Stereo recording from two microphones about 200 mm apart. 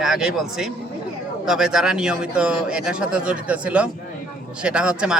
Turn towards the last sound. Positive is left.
turn(degrees=-5)  # may be behind; listen again after turning